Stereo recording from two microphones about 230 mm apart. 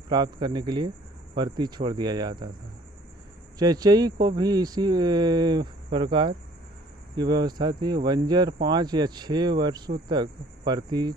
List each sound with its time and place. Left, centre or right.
0.1 s speech: centre
3.5 s speech: centre